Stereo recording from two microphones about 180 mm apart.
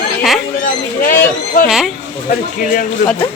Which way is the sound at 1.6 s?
Centre (ahead or behind).